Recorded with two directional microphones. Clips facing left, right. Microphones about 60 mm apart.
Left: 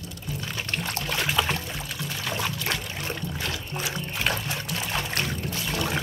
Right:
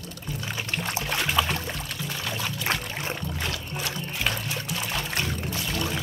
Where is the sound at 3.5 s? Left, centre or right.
Centre.